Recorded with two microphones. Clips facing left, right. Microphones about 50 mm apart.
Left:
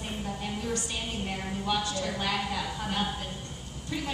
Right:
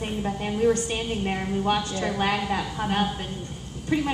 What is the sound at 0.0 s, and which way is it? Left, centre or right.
A woman's voice, right.